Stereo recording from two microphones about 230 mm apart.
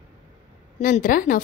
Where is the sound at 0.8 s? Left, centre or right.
Left.